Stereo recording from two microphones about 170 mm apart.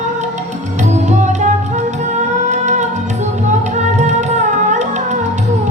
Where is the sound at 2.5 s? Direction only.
45° right (ahead or behind).